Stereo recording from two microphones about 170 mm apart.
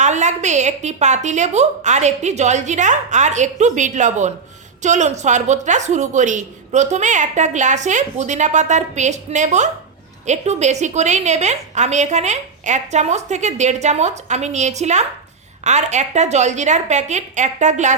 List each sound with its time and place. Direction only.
0.0 s a woman's voice: 45° right (ahead or behind)